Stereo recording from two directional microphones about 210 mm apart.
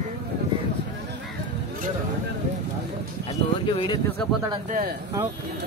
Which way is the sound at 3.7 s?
25° left (ahead or behind).